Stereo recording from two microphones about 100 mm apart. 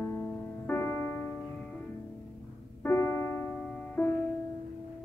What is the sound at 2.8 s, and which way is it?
Music, 25° left (ahead or behind).